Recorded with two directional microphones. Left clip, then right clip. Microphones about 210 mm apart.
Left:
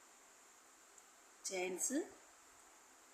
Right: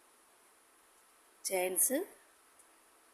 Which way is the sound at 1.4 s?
50° right (ahead or behind).